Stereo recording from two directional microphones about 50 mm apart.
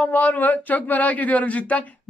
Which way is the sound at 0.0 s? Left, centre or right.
Left.